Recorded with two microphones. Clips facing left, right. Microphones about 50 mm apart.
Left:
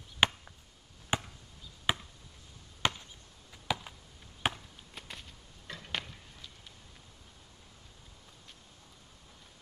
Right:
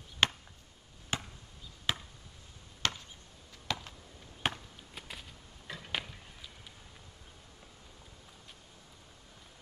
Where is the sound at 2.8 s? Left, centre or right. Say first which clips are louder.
Left 3 dB; centre.